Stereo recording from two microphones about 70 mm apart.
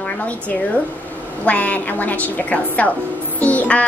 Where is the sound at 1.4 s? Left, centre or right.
Left.